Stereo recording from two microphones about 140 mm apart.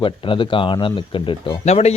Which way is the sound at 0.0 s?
35° left (ahead or behind).